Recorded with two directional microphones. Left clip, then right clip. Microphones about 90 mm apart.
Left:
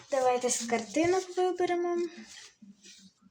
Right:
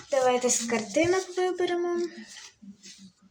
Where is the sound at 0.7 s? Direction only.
45° left (ahead or behind).